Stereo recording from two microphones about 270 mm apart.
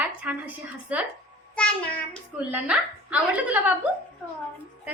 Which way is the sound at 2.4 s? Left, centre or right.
Centre.